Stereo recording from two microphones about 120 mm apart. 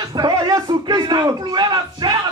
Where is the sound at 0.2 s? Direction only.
35° right (ahead or behind).